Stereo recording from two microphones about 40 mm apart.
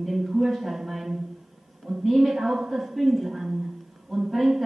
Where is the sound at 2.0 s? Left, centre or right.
Centre.